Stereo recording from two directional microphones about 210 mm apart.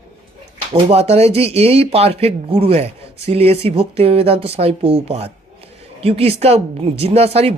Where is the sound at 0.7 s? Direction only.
30° right (ahead or behind).